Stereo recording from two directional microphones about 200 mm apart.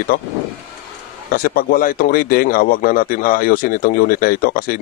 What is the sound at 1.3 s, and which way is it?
Speech, 45° left (ahead or behind).